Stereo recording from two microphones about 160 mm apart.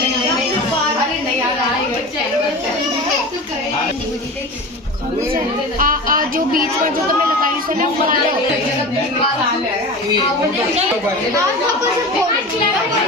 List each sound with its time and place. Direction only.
5.8 s speech: 60° right (ahead or behind)